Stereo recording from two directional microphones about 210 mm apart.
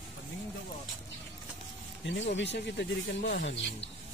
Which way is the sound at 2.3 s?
55° left (ahead or behind).